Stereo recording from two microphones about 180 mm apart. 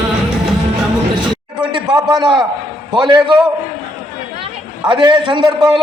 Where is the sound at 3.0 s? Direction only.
25° right (ahead or behind).